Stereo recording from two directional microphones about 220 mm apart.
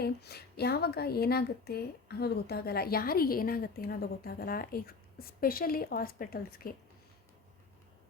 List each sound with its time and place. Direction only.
0.0 s a woman's voice: 45° left (ahead or behind)